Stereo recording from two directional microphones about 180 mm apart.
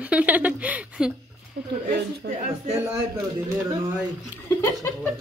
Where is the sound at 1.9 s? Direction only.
55° right (ahead or behind).